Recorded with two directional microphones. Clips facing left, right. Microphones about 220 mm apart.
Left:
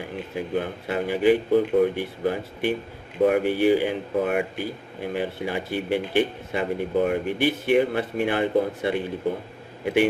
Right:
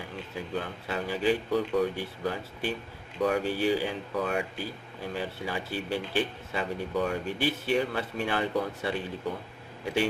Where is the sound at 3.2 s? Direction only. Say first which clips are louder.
Left 7 dB; 55° left (ahead or behind).